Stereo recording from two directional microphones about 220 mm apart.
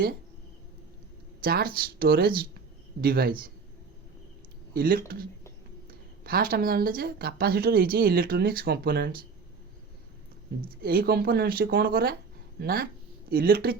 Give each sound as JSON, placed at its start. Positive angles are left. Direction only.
{"t": 1.4, "sound": "a woman's voice", "side_deg": -45}
{"t": 4.7, "sound": "a man's voice", "side_deg": -40}
{"t": 10.8, "sound": "a woman's voice", "side_deg": -45}